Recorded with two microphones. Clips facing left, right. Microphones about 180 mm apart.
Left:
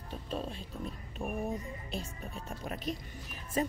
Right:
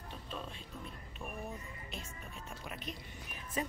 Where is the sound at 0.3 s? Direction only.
35° left (ahead or behind).